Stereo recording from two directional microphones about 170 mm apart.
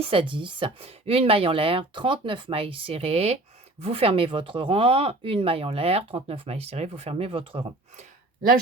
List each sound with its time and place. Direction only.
0.0 s speech: 30° right (ahead or behind)